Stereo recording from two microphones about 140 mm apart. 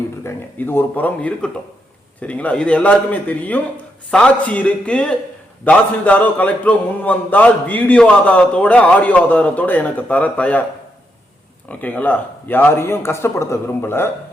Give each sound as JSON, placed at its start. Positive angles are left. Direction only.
{"t": 0.2, "sound": "a man's voice", "side_deg": 15}
{"t": 11.7, "sound": "a man's voice", "side_deg": 10}